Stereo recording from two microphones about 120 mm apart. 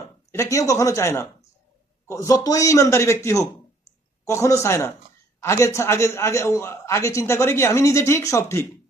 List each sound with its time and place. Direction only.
0.3 s a man's voice: 25° left (ahead or behind)